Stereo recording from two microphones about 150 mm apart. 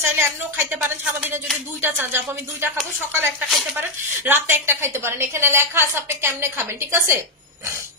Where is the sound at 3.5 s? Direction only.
Centre (ahead or behind).